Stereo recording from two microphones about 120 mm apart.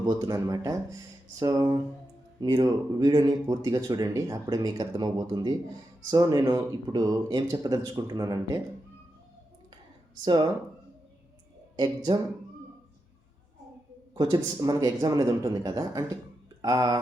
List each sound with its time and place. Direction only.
0.0 s speech: 30° right (ahead or behind)
10.2 s speech: 35° right (ahead or behind)
11.8 s speech: 40° right (ahead or behind)
14.1 s speech: 35° right (ahead or behind)